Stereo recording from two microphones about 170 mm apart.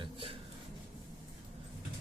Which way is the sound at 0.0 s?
30° right (ahead or behind).